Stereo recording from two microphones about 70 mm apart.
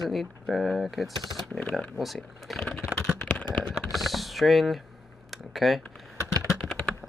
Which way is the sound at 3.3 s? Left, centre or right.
Left.